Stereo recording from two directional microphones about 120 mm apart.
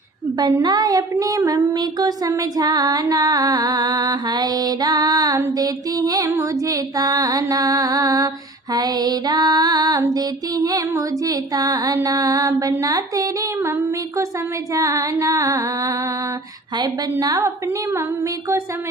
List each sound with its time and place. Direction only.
0.6 s music: 35° right (ahead or behind)